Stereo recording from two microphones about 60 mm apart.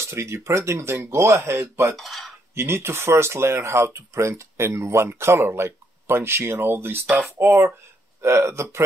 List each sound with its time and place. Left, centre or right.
0.0 s speech: right
2.0 s speech: centre
2.5 s speech: right
8.2 s speech: right